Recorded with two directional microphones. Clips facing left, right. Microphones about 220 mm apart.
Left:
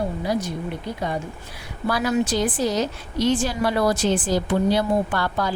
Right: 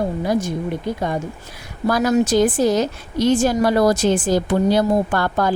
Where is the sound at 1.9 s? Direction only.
45° right (ahead or behind).